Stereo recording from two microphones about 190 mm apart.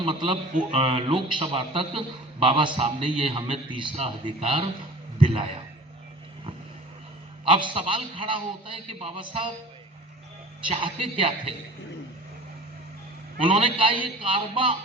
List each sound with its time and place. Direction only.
0.7 s a man's voice: 30° right (ahead or behind)
7.4 s a man's voice: 25° right (ahead or behind)
10.7 s a man's voice: 30° right (ahead or behind)
13.4 s a man's voice: 25° right (ahead or behind)